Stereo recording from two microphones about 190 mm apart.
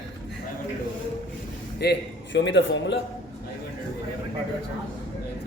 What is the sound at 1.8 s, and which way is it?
A man's voice, 65° left (ahead or behind).